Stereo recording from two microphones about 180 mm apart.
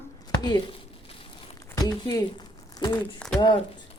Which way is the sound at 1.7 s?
20° left (ahead or behind).